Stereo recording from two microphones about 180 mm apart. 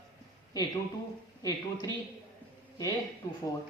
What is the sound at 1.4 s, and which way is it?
Speech, 20° left (ahead or behind).